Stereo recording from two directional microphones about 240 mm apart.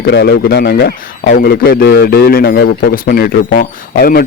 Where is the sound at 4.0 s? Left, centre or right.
Left.